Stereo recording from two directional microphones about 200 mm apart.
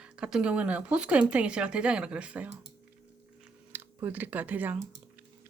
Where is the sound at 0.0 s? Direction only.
5° right (ahead or behind).